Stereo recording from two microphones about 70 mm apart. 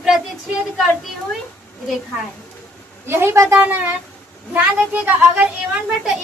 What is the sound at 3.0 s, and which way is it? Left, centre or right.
Speech, right.